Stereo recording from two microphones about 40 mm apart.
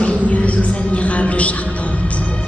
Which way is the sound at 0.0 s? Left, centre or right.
Left.